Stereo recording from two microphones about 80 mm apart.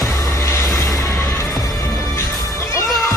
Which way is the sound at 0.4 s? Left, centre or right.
Left.